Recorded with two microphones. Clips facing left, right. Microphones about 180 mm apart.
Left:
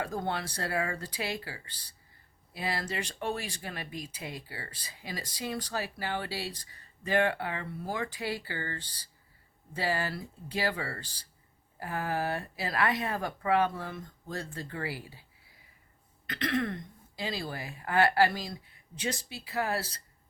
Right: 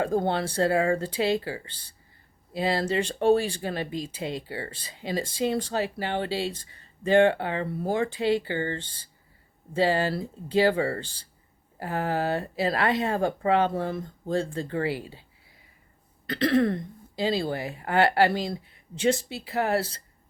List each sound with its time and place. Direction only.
0.0 s speech: 30° right (ahead or behind)